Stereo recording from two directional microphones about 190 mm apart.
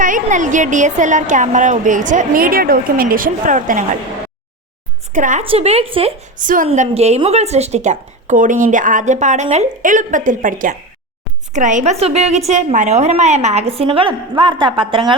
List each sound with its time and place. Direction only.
0.0 s a woman's voice: 45° right (ahead or behind)
5.1 s a woman's voice: 45° right (ahead or behind)
5.4 s a woman's voice: 30° right (ahead or behind)
6.4 s a woman's voice: 45° right (ahead or behind)
6.7 s a woman's voice: 35° right (ahead or behind)